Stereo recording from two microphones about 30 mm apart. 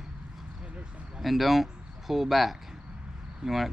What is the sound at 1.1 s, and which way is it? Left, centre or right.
Speech, centre.